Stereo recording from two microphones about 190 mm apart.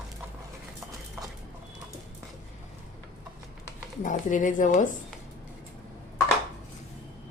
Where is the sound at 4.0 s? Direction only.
40° left (ahead or behind).